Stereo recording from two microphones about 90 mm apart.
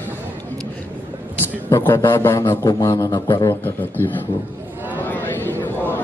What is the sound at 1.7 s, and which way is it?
Speech, 25° left (ahead or behind).